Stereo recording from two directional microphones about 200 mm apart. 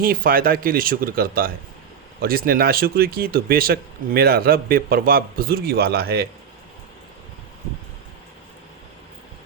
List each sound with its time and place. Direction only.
0.0 s speech: 45° right (ahead or behind)